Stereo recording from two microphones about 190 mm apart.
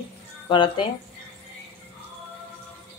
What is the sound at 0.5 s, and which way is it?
Speech, 25° left (ahead or behind).